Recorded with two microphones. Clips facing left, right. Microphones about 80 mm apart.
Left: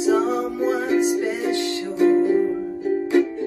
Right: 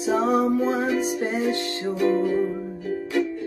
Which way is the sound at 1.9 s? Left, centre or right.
Left.